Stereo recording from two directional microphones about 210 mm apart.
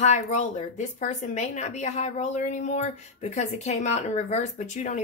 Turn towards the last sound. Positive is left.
turn(degrees=35)  # may be behind; listen again after turning